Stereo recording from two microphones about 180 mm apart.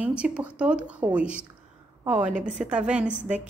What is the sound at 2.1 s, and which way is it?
Speech, 40° right (ahead or behind).